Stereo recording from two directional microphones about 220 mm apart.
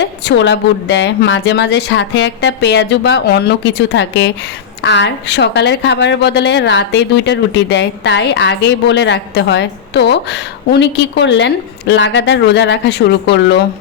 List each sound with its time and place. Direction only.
0.3 s a woman's voice: 55° left (ahead or behind)